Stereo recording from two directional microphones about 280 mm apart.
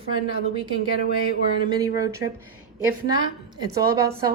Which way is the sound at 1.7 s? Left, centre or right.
Centre.